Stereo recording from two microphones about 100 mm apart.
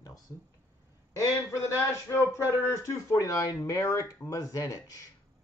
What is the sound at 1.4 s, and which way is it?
Speech, 25° left (ahead or behind).